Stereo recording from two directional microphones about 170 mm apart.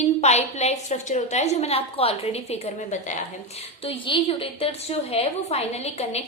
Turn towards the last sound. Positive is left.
turn(degrees=40)  # may be behind; listen again after turning